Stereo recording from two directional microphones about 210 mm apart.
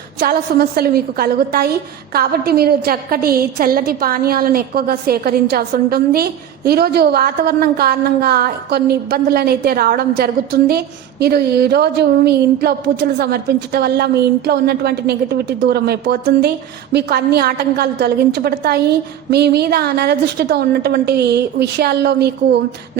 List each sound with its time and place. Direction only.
0.2 s a woman's voice: 50° right (ahead or behind)